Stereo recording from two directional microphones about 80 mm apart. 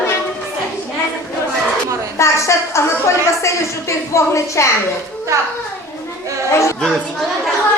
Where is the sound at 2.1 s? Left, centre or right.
Left.